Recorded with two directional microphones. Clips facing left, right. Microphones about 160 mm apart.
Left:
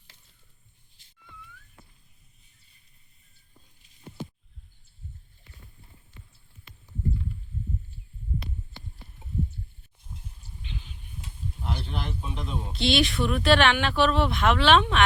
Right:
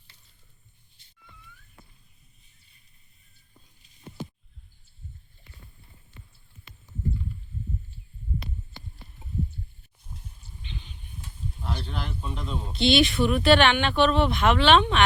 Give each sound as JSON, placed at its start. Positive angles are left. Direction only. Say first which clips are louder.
{"t": 1.0, "sound": "music", "louder": "right 1 dB", "side_deg": 90}
{"t": 10.6, "sound": "a sound", "louder": "left 1 dB", "side_deg": 5}
{"t": 11.7, "sound": "speech", "louder": "even", "side_deg": 10}
{"t": 12.7, "sound": "speech", "louder": "right 3 dB", "side_deg": 0}